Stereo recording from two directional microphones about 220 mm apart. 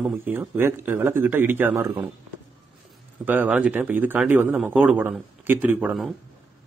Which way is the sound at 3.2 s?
10° right (ahead or behind).